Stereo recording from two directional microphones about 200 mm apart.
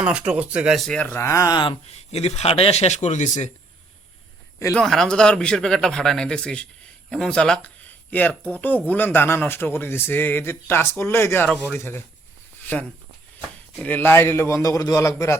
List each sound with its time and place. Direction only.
0.0 s speech: 5° right (ahead or behind); by 1.7 s 20° left (ahead or behind)
1.9 s speech: 30° left (ahead or behind)
4.8 s a man's voice: 5° left (ahead or behind)
13.7 s a man's voice: 10° left (ahead or behind)